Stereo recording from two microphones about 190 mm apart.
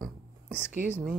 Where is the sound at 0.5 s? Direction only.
10° left (ahead or behind).